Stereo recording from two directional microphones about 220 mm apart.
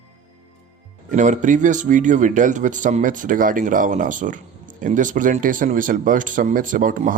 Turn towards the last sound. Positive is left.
turn(degrees=-40)  # may be behind; listen again after turning